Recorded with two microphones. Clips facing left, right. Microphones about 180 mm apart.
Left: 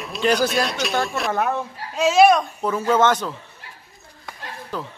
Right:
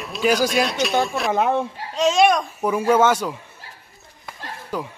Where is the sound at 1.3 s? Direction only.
25° right (ahead or behind).